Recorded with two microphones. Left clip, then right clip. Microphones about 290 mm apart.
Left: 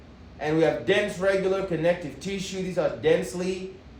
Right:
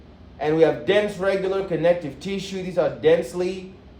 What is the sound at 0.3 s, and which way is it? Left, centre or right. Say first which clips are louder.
A man's voice: right 5 dB; right.